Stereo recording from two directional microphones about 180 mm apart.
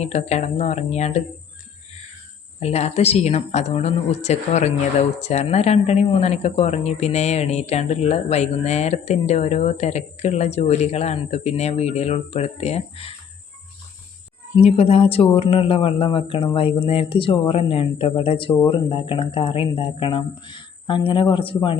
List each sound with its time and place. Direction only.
0.0 s speech: 40° left (ahead or behind)
2.6 s speech: 35° left (ahead or behind)
14.5 s speech: 35° left (ahead or behind)